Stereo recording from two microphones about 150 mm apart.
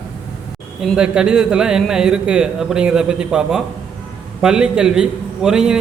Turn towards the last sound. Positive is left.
turn(degrees=-5)  # may be behind; listen again after turning